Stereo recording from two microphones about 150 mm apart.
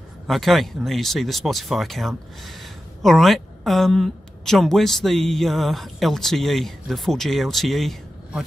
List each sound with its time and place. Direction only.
0.3 s speech: centre (ahead or behind)